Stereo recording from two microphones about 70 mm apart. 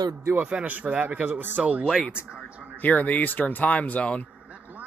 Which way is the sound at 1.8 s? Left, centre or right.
Centre.